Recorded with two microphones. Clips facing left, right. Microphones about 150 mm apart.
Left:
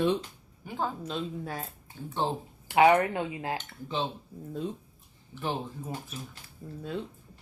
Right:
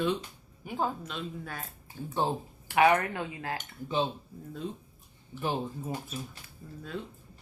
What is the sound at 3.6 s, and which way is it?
Speech, 10° right (ahead or behind).